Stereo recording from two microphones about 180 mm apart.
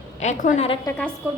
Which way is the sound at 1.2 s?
10° right (ahead or behind).